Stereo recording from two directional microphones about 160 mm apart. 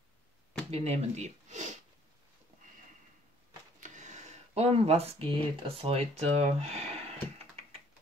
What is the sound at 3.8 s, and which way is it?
Speech, 50° right (ahead or behind).